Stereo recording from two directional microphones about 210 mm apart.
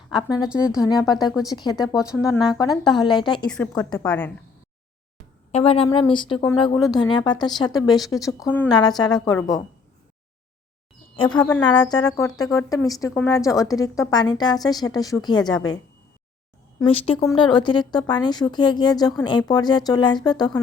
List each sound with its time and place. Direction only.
0.1 s a woman's voice: 20° left (ahead or behind)
0.3 s a woman's voice: 5° right (ahead or behind)
0.8 s a woman's voice: 20° left (ahead or behind)
3.8 s a woman's voice: 5° left (ahead or behind)
5.5 s a woman's voice: 30° left (ahead or behind); by 8.7 s 5° left (ahead or behind)
8.7 s a woman's voice: 20° left (ahead or behind)
11.2 s a woman's voice: 20° left (ahead or behind)
16.9 s a woman's voice: 25° left (ahead or behind)